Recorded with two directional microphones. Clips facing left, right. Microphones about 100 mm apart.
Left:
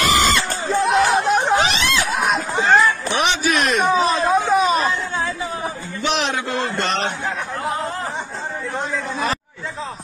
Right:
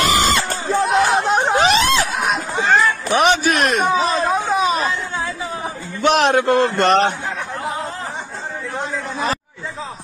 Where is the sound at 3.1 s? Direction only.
45° right (ahead or behind).